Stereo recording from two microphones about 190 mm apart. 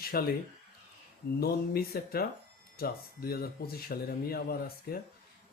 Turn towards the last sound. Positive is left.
turn(degrees=55)  # may be behind; listen again after turning